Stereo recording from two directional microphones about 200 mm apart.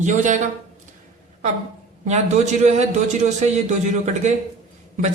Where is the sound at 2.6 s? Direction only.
35° right (ahead or behind).